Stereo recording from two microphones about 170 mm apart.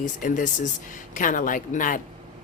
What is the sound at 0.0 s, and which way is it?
Speech, 50° left (ahead or behind).